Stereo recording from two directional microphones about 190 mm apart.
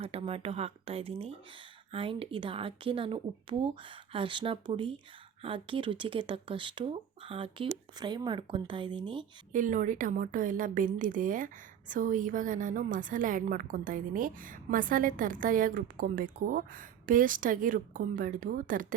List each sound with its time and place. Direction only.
0.0 s speech: 30° right (ahead or behind)
9.5 s a woman's voice: 45° right (ahead or behind)